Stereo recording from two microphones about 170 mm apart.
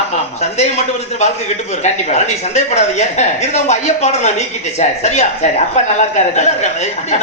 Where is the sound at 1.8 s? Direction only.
40° left (ahead or behind).